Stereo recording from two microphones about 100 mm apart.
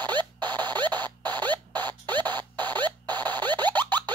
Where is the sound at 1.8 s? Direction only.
20° left (ahead or behind).